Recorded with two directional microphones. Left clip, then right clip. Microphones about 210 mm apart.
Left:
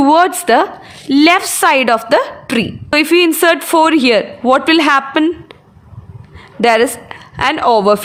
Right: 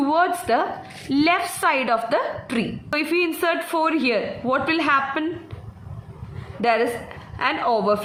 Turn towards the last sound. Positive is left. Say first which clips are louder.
# left 10 dB
turn(degrees=55)  # may be behind; listen again after turning